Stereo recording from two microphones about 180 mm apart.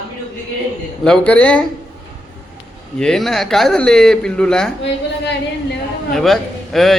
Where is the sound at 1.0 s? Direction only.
5° left (ahead or behind).